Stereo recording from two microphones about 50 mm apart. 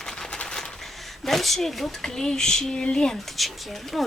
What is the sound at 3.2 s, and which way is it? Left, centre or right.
Speech, centre.